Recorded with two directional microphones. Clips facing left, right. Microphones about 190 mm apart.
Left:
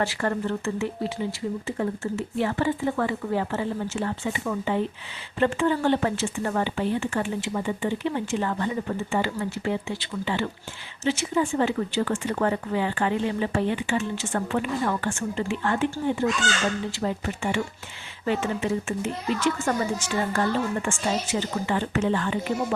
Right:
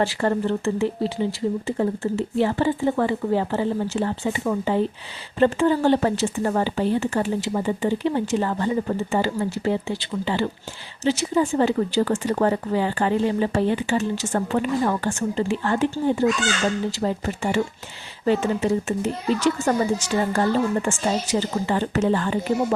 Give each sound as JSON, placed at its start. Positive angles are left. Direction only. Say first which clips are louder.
{"t": 0.0, "sound": "speech", "louder": "right 4 dB", "side_deg": -30}